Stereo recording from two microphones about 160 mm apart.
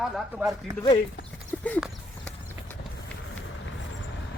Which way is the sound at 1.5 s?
5° left (ahead or behind).